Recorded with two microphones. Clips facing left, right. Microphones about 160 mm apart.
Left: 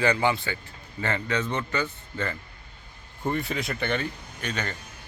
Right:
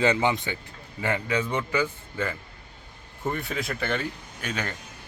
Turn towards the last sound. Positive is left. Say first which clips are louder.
# even
turn(degrees=-5)  # may be behind; listen again after turning